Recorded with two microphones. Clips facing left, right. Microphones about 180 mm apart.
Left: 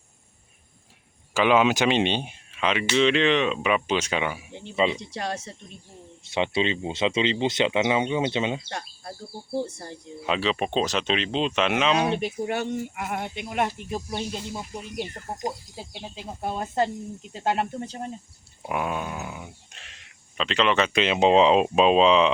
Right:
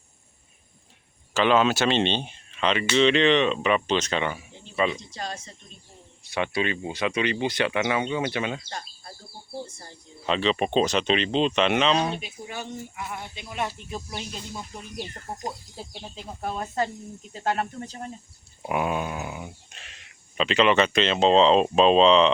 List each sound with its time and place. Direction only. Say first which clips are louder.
1.3 s speech: left 1 dB; 10° left (ahead or behind)
4.7 s speech: left 1 dB; 20° left (ahead or behind)
4.9 s speech: left 4 dB; 70° left (ahead or behind)
6.2 s speech: left 2 dB; 25° left (ahead or behind)
9.6 s speech: left 7 dB; 70° left (ahead or behind)
10.2 s speech: right 1 dB; 5° left (ahead or behind)
12.1 s speech: left 9 dB; 65° left (ahead or behind)
13.0 s speech: left 5 dB; 50° left (ahead or behind)
14.1 s speech: left 5 dB; 25° left (ahead or behind)
14.6 s speech: left 3 dB; 15° left (ahead or behind)
18.6 s speech: right 2 dB; 5° right (ahead or behind)